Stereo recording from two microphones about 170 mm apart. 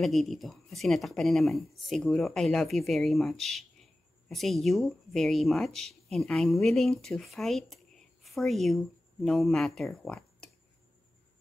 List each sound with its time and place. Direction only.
0.0 s speech: centre (ahead or behind)